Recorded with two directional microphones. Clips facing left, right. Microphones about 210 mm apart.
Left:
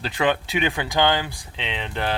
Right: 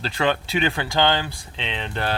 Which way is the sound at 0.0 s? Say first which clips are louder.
Even; 15° left (ahead or behind).